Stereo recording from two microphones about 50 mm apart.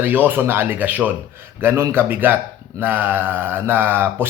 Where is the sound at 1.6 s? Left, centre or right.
Right.